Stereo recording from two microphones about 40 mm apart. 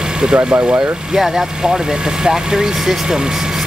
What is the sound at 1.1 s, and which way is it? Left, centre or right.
Speech, centre.